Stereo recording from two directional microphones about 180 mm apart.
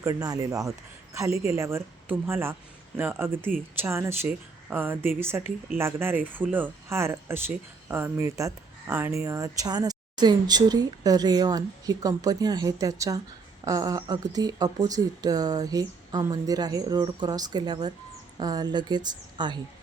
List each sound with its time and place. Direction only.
0.0 s a woman's voice: 20° right (ahead or behind)